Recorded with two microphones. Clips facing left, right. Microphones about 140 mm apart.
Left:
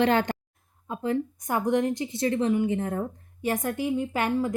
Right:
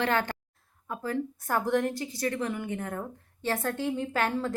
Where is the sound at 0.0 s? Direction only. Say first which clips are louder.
Left 5 dB; 20° left (ahead or behind).